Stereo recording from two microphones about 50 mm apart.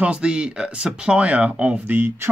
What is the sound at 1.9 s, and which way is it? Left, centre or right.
Speech, right.